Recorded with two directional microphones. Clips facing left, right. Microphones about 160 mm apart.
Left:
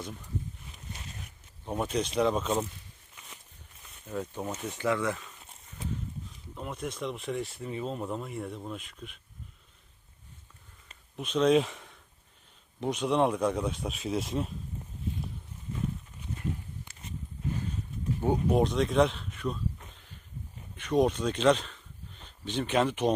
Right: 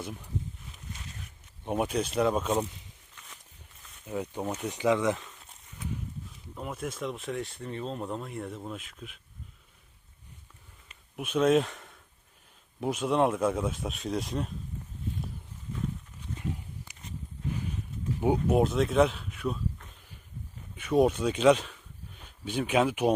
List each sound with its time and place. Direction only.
0.0 s speech: 10° right (ahead or behind)
1.6 s speech: 20° right (ahead or behind)
1.9 s speech: 5° right (ahead or behind)
4.0 s speech: 10° right (ahead or behind)
6.5 s speech: centre (ahead or behind)
11.2 s speech: 5° right (ahead or behind)
18.2 s speech: 5° right (ahead or behind)
20.7 s speech: 5° right (ahead or behind)